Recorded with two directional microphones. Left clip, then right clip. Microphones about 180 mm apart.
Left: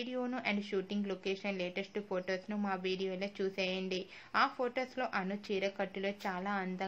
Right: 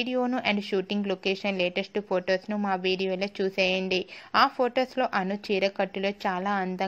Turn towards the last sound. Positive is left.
turn(degrees=-40)  # may be behind; listen again after turning